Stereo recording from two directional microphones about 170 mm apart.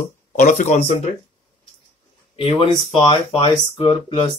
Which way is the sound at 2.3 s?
35° left (ahead or behind).